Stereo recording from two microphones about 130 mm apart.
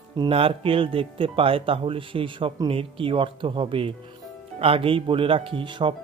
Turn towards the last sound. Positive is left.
turn(degrees=-40)  # may be behind; listen again after turning